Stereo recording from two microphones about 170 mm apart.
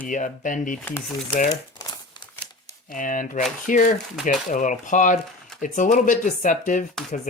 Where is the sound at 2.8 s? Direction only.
50° left (ahead or behind).